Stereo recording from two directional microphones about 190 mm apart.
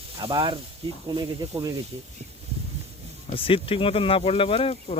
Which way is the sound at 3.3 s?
30° left (ahead or behind).